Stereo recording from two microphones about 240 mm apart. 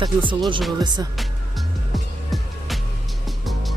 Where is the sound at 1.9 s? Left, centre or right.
Centre.